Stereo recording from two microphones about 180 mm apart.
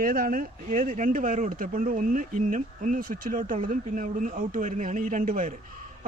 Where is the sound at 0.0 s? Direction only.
55° right (ahead or behind).